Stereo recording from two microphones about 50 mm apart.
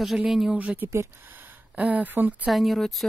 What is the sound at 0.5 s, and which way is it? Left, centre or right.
Speech, right.